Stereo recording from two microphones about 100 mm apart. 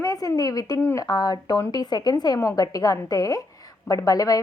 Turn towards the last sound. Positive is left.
turn(degrees=40)  # may be behind; listen again after turning